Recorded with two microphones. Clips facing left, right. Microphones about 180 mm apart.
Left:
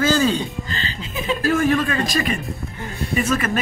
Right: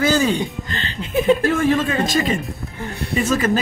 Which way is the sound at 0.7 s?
60° right (ahead or behind).